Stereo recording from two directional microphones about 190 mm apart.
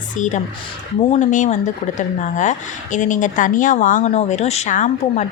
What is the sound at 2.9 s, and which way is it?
Speech, 40° left (ahead or behind).